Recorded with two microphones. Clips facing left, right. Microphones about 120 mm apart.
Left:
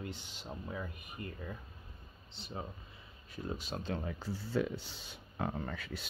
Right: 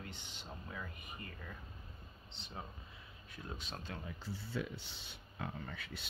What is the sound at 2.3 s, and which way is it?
Speech, 5° left (ahead or behind).